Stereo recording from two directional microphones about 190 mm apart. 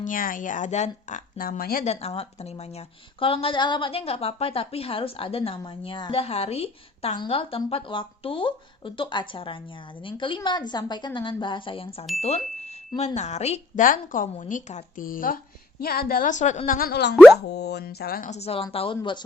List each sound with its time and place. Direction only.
0.0 s speech: 45° left (ahead or behind)
1.9 s a woman's voice: 35° left (ahead or behind)
13.1 s a woman's voice: 35° left (ahead or behind); by 18.3 s 55° left (ahead or behind)
18.3 s a woman's voice: 35° left (ahead or behind)